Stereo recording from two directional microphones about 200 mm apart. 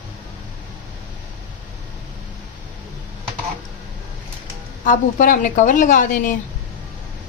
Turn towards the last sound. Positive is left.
turn(degrees=40)  # may be behind; listen again after turning